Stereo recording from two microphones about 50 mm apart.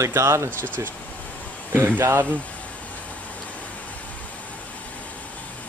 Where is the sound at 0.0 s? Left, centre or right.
Right.